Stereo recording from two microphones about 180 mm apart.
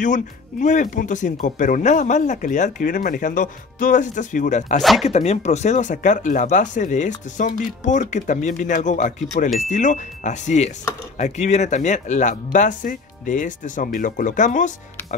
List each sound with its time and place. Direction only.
0.0 s speech: 45° left (ahead or behind)